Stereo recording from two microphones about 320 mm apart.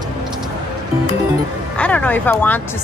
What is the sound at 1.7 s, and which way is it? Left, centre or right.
Speech, centre.